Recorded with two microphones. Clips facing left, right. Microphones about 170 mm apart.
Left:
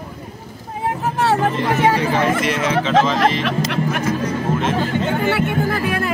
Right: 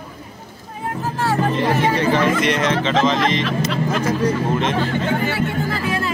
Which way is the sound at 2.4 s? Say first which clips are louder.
Even; 5° left (ahead or behind).